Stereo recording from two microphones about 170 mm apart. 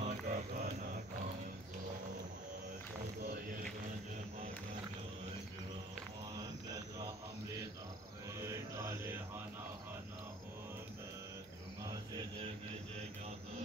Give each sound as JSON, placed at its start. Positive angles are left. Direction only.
{"t": 0.0, "sound": "mantra", "side_deg": -45}
{"t": 8.4, "sound": "music", "side_deg": -15}